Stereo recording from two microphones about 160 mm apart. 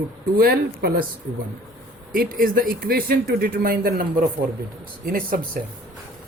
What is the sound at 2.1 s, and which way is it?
Speech, 60° right (ahead or behind).